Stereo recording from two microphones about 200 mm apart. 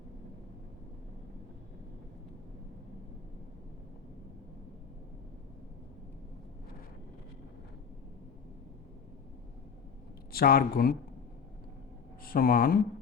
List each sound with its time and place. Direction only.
10.3 s speech: 50° left (ahead or behind)
12.2 s speech: 45° left (ahead or behind)